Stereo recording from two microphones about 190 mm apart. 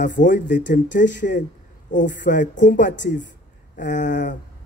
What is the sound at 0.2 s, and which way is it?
Speech, 45° left (ahead or behind).